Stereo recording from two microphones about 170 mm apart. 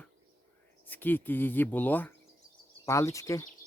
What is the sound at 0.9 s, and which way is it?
Speech, 10° left (ahead or behind).